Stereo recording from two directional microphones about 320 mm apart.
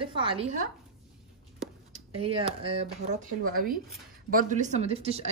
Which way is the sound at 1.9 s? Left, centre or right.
Centre.